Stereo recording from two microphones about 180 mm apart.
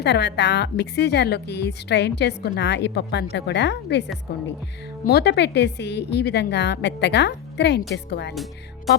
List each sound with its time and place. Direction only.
0.0 s a woman's voice: 70° left (ahead or behind)